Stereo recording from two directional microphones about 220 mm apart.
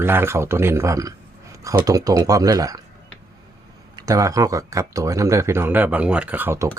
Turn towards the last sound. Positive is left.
turn(degrees=-10)  # may be behind; listen again after turning